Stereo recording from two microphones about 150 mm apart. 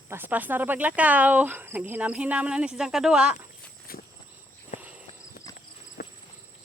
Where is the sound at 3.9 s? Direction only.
80° left.